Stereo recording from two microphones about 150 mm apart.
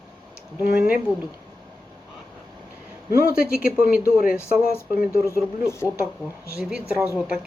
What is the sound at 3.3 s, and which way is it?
Speech, 80° left.